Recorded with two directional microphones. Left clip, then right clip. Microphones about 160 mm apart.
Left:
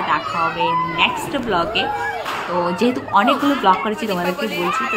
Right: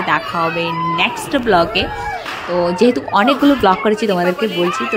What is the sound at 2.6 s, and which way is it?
Speech, 30° right (ahead or behind).